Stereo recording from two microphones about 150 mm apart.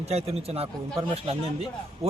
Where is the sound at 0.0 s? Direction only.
45° right (ahead or behind).